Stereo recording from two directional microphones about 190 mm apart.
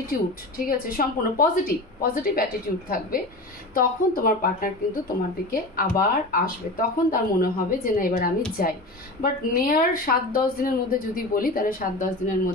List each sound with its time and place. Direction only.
0.6 s a woman's voice: 50° left (ahead or behind)